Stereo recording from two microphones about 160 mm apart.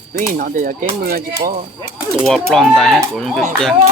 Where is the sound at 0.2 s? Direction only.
55° right (ahead or behind).